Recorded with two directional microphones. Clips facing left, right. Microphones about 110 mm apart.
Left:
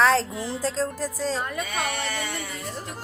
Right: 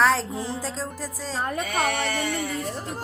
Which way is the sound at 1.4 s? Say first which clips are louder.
Right 2 dB; 35° right (ahead or behind).